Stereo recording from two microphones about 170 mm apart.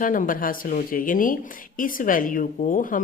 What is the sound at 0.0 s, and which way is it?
A woman's voice, 50° left (ahead or behind).